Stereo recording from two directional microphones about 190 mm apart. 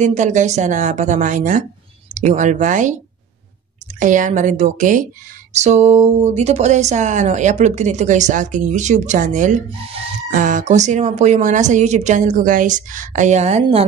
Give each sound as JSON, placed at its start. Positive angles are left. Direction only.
{"t": 0.0, "sound": "speech", "side_deg": -40}
{"t": 9.7, "sound": "speech", "side_deg": -30}
{"t": 10.3, "sound": "speech", "side_deg": -40}